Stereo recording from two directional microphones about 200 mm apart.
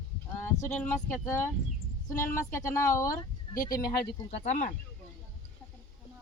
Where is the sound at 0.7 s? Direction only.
5° left (ahead or behind).